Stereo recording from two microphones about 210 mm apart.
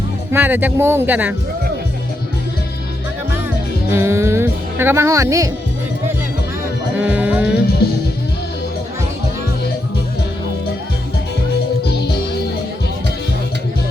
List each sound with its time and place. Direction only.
0.3 s speech: 10° right (ahead or behind)
3.9 s speech: 10° right (ahead or behind)
6.9 s speech: 5° right (ahead or behind)
7.8 s music: 50° left (ahead or behind)